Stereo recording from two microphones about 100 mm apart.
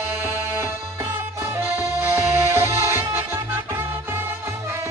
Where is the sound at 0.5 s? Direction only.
25° right (ahead or behind).